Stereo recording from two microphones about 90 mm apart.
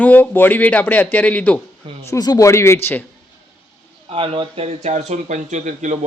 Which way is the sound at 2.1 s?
45° left (ahead or behind).